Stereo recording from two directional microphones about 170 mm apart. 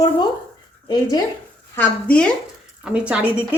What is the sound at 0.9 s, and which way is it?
Speech, 25° left (ahead or behind).